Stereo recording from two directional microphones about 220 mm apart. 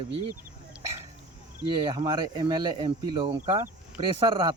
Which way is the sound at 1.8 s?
20° right (ahead or behind).